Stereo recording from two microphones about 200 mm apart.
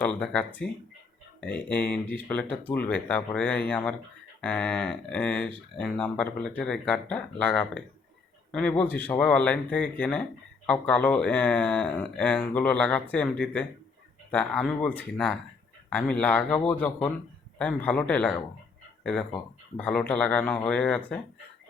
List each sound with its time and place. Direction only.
0.0 s speech: 5° left (ahead or behind)
19.7 s speech: 5° left (ahead or behind)